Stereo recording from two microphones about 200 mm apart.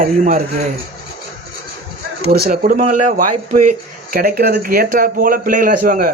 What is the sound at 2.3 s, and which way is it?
A man's voice, 45° right (ahead or behind).